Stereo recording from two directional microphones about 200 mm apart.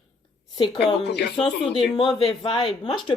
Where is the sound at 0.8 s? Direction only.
55° left (ahead or behind).